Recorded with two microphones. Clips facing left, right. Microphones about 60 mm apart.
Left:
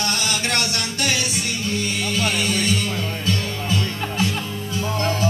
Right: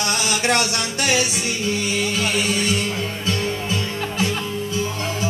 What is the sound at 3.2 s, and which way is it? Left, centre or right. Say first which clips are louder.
Music: right 1 dB; centre.